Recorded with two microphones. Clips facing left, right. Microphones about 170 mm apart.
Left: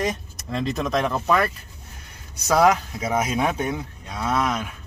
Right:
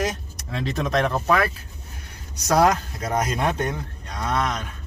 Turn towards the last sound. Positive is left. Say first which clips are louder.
# left 2 dB
turn(degrees=5)  # may be behind; listen again after turning